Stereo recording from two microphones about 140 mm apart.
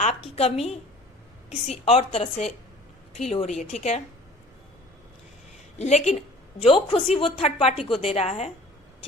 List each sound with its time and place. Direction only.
0.0 s a woman's voice: 45° left (ahead or behind)
5.8 s a woman's voice: 55° left (ahead or behind)
6.6 s a woman's voice: 40° left (ahead or behind)